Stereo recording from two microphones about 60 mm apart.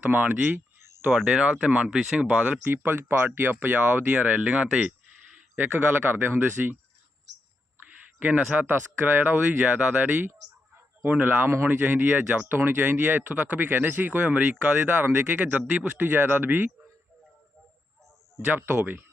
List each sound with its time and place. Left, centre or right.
0.0 s speech: right
0.8 s a sound: right
1.1 s speech: centre
2.6 s speech: right
4.1 s speech: right
6.1 s speech: right
8.2 s speech: right
8.6 s speech: right
18.5 s speech: right